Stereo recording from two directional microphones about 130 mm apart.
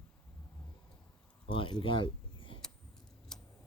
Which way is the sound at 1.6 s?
40° left (ahead or behind).